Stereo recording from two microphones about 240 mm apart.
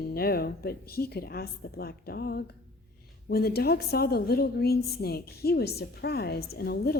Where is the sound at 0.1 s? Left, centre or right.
Left.